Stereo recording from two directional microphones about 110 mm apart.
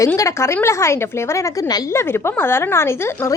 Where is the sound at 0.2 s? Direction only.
25° left (ahead or behind).